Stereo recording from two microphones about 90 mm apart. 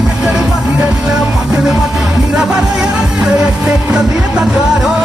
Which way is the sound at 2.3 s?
10° right (ahead or behind).